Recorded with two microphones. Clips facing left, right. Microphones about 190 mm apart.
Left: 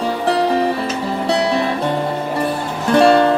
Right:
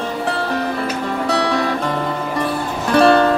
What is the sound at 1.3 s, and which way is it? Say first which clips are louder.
Music: left 2 dB; 30° left (ahead or behind).